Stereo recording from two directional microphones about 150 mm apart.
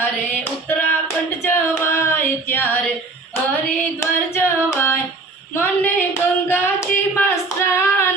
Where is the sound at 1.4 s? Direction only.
15° left (ahead or behind).